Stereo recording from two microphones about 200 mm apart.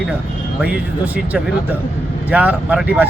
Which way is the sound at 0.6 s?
5° right (ahead or behind).